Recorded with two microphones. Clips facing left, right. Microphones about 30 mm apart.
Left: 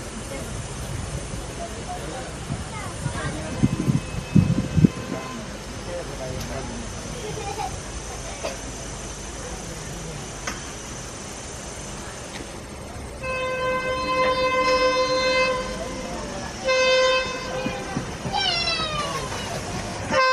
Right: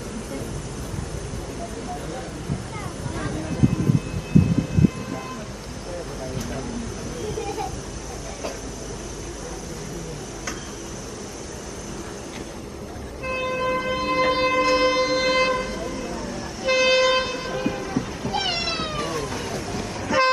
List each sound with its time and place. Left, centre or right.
3.2 s vehicle: centre
7.3 s a sound: centre
13.2 s siren: centre
17.8 s meow: centre
18.3 s cat: centre
18.9 s cat: centre